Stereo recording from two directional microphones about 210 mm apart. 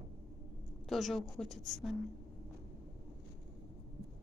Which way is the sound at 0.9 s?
Centre (ahead or behind).